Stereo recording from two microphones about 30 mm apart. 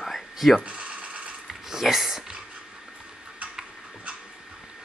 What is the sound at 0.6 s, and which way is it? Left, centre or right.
Ratchet, right.